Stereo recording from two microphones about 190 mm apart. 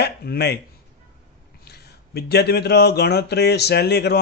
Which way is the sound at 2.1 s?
55° left (ahead or behind).